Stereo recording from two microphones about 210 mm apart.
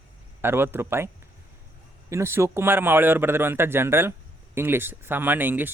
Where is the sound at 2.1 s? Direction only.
10° right (ahead or behind).